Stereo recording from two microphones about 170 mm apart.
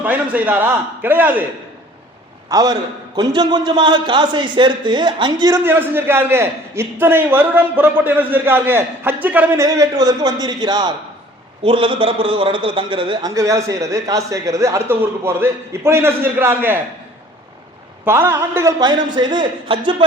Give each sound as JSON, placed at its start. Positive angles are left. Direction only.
{"t": 0.0, "sound": "a man's voice", "side_deg": -10}
{"t": 2.5, "sound": "a man's voice", "side_deg": -20}
{"t": 5.6, "sound": "a man's voice", "side_deg": -15}
{"t": 9.6, "sound": "a man's voice", "side_deg": -20}
{"t": 18.0, "sound": "a man's voice", "side_deg": -15}